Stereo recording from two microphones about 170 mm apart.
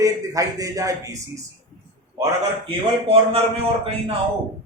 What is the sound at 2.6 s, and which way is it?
Speech, 35° right (ahead or behind).